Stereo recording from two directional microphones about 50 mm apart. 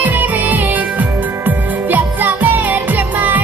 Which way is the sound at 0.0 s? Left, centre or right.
Right.